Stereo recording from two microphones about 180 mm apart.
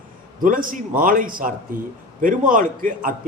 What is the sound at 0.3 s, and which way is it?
Speech, 50° right (ahead or behind).